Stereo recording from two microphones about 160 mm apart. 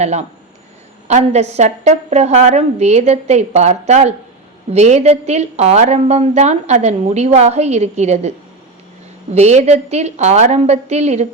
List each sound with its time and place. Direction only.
0.0 s a woman's voice: 45° right (ahead or behind)
9.3 s a woman's voice: 45° right (ahead or behind)